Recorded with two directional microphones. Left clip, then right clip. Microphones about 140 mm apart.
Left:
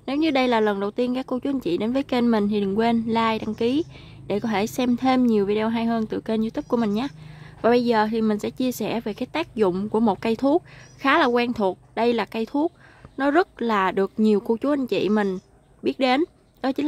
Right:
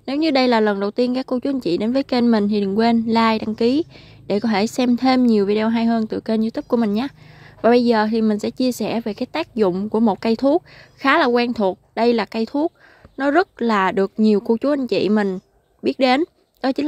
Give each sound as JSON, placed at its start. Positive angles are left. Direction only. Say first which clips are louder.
{"t": 0.0, "sound": "a woman's voice", "louder": "right 4 dB", "side_deg": -35}